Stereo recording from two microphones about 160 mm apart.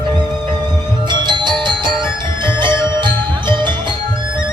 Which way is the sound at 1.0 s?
30° right (ahead or behind).